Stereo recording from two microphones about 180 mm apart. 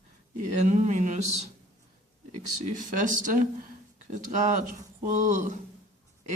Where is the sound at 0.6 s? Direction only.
40° right (ahead or behind).